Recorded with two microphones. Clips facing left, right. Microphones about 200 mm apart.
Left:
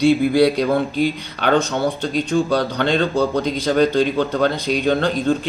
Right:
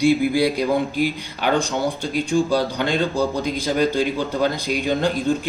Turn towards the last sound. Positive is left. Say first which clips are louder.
# left 2 dB
turn(degrees=65)  # may be behind; listen again after turning